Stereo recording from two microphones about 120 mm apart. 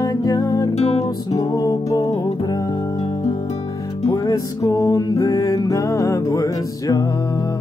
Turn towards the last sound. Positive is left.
turn(degrees=30)  # may be behind; listen again after turning